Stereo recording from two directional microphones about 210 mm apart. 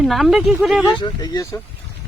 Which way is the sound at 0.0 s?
Centre (ahead or behind).